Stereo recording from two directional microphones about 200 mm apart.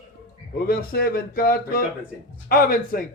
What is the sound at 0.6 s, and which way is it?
A man's voice, 50° left (ahead or behind).